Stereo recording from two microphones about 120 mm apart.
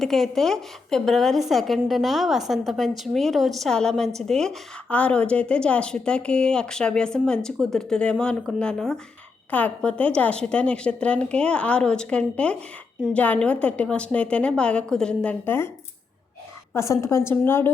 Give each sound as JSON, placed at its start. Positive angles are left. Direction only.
{"t": 0.0, "sound": "a woman's voice", "side_deg": 0}
{"t": 16.7, "sound": "a woman's voice", "side_deg": 25}